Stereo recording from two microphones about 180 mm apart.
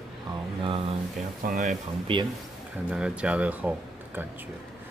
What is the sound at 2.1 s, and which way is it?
Speech, 30° right (ahead or behind).